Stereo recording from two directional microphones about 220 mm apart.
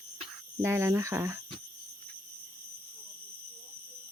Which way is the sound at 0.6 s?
10° right (ahead or behind).